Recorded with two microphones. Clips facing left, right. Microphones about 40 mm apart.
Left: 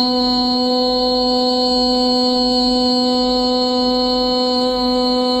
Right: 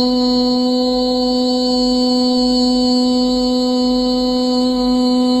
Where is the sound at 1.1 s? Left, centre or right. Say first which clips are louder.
Right 1 dB; left.